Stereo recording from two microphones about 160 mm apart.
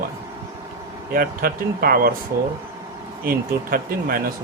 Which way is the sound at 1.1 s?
65° right (ahead or behind).